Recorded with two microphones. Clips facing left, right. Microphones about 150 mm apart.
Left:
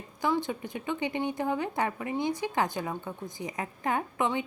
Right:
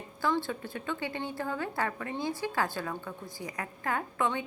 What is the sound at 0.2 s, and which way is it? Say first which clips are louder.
A woman's voice: left 2 dB; 15° left (ahead or behind).